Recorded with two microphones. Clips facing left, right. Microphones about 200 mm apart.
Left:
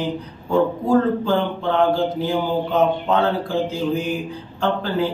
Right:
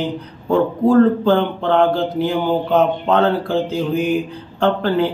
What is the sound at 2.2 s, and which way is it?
Speech, 65° right (ahead or behind).